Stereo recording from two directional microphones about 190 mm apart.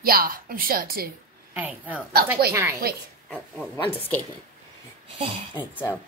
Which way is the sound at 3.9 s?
10° left (ahead or behind).